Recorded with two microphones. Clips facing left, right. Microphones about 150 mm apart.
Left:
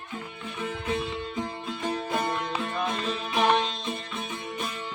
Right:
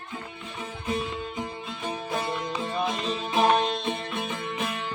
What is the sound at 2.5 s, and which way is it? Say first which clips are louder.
Music: right 1 dB; 15° right (ahead or behind).